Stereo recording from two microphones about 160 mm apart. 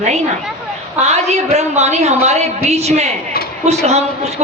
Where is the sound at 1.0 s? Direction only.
40° right (ahead or behind).